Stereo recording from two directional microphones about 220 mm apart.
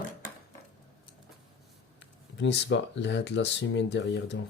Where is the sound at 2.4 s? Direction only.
55° left (ahead or behind).